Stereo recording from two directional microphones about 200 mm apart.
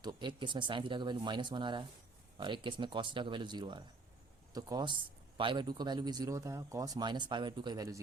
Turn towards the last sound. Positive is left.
turn(degrees=-20)  # may be behind; listen again after turning